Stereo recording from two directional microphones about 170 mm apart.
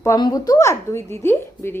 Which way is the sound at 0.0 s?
20° left (ahead or behind).